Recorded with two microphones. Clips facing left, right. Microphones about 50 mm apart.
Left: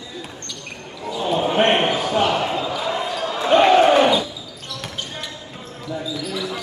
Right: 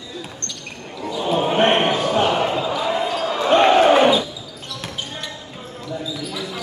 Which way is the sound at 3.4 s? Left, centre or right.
Centre.